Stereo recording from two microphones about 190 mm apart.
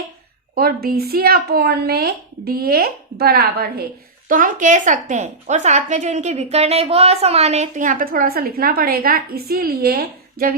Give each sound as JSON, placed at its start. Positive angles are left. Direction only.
{"t": 0.5, "sound": "speech", "side_deg": -50}
{"t": 4.3, "sound": "a woman's voice", "side_deg": -45}